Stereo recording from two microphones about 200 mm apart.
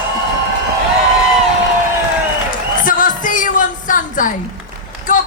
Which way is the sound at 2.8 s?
40° left (ahead or behind).